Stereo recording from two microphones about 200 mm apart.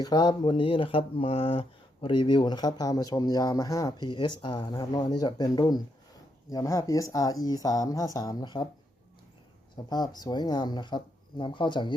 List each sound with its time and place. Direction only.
0.0 s speech: 20° left (ahead or behind)
9.9 s speech: 20° left (ahead or behind)